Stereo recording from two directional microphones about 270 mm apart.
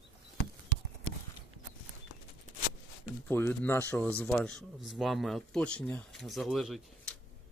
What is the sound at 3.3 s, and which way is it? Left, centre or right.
Speech, centre.